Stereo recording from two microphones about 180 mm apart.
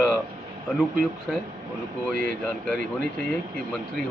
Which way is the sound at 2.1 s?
55° right (ahead or behind).